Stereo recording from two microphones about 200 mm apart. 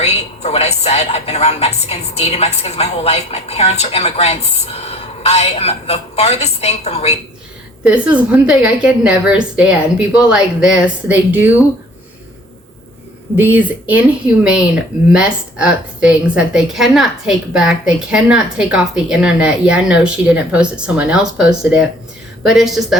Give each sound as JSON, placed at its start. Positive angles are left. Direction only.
{"t": 0.0, "sound": "a woman's voice", "side_deg": 30}
{"t": 7.9, "sound": "a woman's voice", "side_deg": -5}
{"t": 13.3, "sound": "a woman's voice", "side_deg": -10}